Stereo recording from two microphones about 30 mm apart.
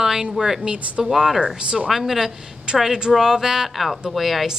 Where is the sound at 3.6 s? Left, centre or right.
Centre.